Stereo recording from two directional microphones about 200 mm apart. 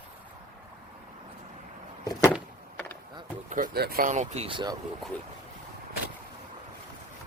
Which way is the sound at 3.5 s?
40° right (ahead or behind).